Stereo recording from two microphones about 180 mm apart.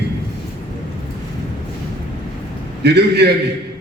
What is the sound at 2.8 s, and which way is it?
Speech, 65° right (ahead or behind).